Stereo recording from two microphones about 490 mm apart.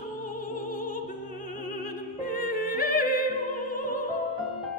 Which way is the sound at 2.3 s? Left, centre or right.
Centre.